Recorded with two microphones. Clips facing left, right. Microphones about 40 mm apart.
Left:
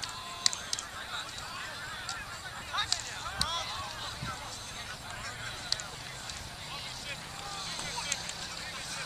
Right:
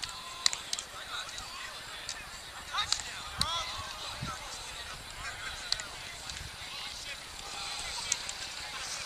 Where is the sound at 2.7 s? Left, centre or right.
Centre.